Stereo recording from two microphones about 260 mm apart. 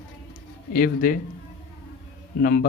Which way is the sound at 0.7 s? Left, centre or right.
Left.